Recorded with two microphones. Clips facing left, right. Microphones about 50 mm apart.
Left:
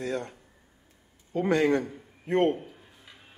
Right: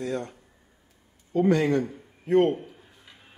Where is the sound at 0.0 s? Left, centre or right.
Left.